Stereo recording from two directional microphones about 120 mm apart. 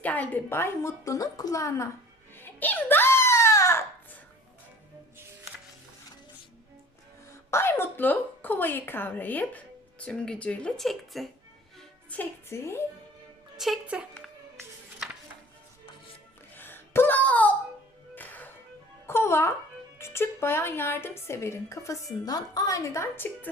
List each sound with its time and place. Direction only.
0.0 s a woman's voice: 15° left (ahead or behind)
2.3 s baby cry: 15° left (ahead or behind)
7.5 s a woman's voice: 20° left (ahead or behind); by 11.3 s centre (ahead or behind)
11.8 s a child's voice: 15° left (ahead or behind)
13.6 s a woman's voice: 5° right (ahead or behind)
16.6 s a sound: 15° left (ahead or behind)
18.1 s music: 15° left (ahead or behind)
20.0 s a woman's voice: 20° left (ahead or behind)